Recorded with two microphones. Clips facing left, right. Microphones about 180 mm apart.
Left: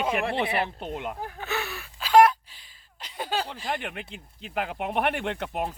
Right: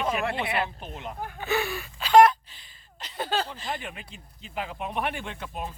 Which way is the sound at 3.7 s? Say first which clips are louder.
Left 3 dB; 60° left (ahead or behind).